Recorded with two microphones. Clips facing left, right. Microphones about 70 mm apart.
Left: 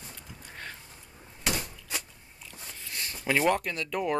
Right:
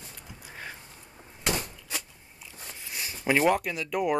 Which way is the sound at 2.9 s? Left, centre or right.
Centre.